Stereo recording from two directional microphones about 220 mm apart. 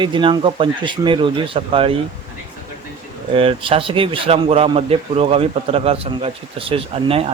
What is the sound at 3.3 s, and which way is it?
Speech, 25° right (ahead or behind).